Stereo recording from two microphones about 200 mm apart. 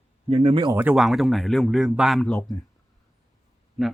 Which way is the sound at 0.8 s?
5° right (ahead or behind).